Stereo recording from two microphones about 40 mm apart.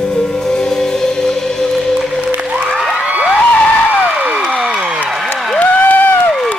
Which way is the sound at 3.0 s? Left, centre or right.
Right.